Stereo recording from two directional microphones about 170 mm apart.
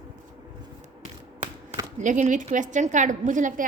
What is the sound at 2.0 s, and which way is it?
A woman's voice, 45° right (ahead or behind).